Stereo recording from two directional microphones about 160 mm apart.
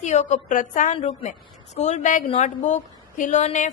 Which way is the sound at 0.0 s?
45° left (ahead or behind).